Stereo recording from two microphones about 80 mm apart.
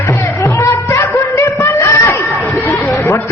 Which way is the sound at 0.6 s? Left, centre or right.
Left.